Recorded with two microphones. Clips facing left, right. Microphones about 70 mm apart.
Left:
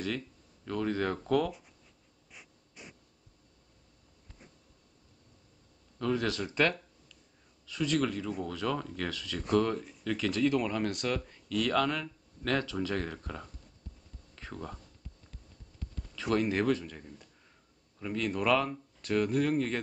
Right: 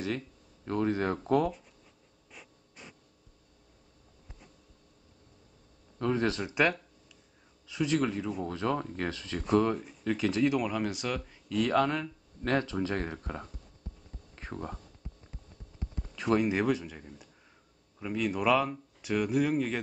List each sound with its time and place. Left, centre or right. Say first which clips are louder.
0.7 s speech: right 2 dB; right
5.9 s speech: right 2 dB; right
10.5 s speech: even; centre
11.4 s speech: right 2 dB; right
14.3 s a sound: right 3 dB; right
16.3 s speech: even; centre